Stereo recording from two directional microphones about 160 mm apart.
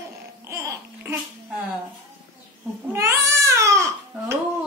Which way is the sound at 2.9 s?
20° right (ahead or behind).